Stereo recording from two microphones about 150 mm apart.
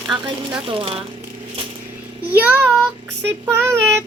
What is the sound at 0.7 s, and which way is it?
Speech, 35° right (ahead or behind).